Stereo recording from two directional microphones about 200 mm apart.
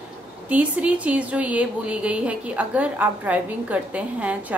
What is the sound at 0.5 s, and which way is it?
A woman's voice, 5° right (ahead or behind).